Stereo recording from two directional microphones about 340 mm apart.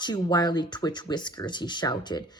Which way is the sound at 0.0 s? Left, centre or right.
Centre.